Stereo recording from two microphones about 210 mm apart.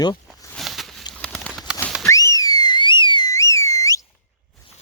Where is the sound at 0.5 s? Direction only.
Centre (ahead or behind).